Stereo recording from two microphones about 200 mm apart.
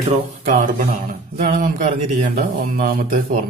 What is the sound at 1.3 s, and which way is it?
A man's voice, 40° right (ahead or behind).